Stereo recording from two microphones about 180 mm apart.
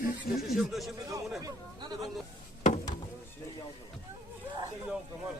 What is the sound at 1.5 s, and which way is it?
Speech, 20° right (ahead or behind).